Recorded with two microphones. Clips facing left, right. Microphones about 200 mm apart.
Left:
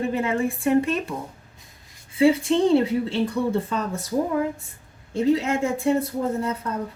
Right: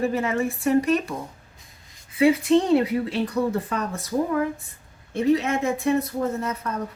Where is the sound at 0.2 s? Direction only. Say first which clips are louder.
Even; 30° left (ahead or behind).